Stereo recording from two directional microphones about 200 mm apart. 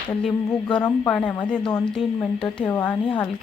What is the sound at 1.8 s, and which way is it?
Speech, 5° left (ahead or behind).